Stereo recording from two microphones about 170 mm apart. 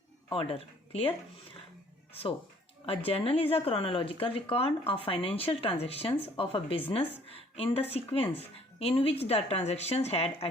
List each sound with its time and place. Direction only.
0.3 s speech: 30° left (ahead or behind)
2.8 s speech: 35° left (ahead or behind)